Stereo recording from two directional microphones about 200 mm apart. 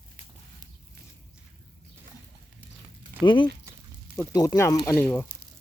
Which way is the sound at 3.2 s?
25° left (ahead or behind).